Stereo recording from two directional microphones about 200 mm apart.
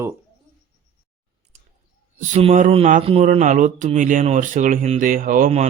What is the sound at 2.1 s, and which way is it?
Speech, 30° right (ahead or behind).